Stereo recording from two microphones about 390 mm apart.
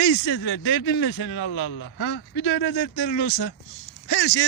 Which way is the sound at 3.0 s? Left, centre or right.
Left.